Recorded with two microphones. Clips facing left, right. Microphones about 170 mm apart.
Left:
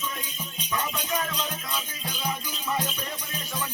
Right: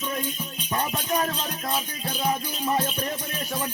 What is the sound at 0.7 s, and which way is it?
Music, 45° right (ahead or behind).